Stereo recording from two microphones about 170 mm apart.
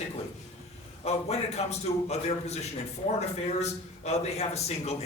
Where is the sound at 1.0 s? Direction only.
40° left (ahead or behind).